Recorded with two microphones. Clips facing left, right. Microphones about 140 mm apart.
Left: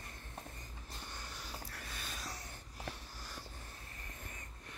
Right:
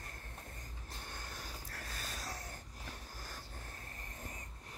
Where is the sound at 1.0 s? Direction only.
50° right (ahead or behind).